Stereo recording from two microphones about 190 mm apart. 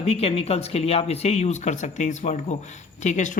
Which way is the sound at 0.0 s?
35° left (ahead or behind).